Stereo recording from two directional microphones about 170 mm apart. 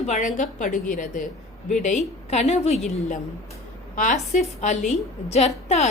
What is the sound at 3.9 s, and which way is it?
A woman's voice, 50° left (ahead or behind).